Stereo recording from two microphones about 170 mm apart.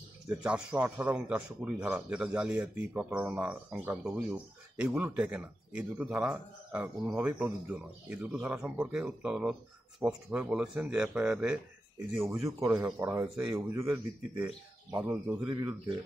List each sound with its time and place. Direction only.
0.3 s speech: 5° right (ahead or behind)
12.6 s speech: 10° right (ahead or behind)